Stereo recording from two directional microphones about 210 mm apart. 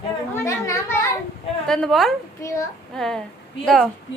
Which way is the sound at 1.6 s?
Centre (ahead or behind).